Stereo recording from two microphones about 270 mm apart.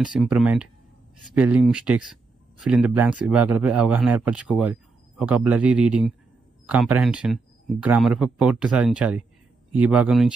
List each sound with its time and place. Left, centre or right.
0.0 s speech: centre